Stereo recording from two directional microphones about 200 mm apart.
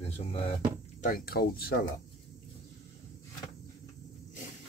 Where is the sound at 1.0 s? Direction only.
40° left (ahead or behind).